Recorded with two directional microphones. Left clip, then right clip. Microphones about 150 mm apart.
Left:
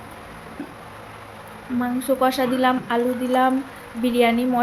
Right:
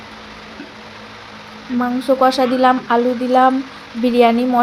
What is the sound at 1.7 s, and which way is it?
A woman's voice, 20° right (ahead or behind).